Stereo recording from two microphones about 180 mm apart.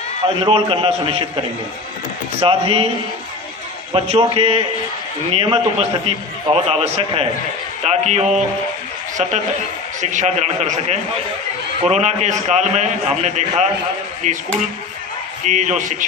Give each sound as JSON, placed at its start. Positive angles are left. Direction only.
{"t": 0.3, "sound": "a man's voice", "side_deg": -30}
{"t": 3.9, "sound": "a man's voice", "side_deg": -35}
{"t": 10.0, "sound": "a man's voice", "side_deg": -40}
{"t": 15.4, "sound": "speech", "side_deg": -40}